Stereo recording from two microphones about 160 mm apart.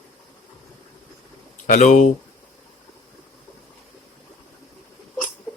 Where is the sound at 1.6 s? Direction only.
50° left (ahead or behind).